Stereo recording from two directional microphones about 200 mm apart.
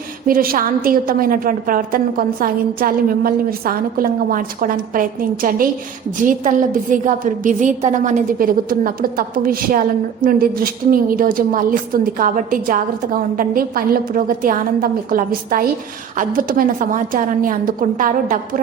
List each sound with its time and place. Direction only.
0.3 s a woman's voice: 45° right (ahead or behind)